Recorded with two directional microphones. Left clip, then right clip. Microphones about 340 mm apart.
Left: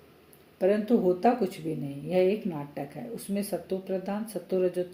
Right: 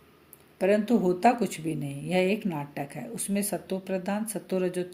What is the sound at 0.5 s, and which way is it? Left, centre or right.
Speech, right.